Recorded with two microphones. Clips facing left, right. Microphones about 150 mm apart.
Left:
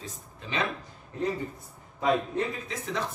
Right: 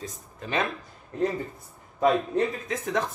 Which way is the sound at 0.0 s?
45° right (ahead or behind).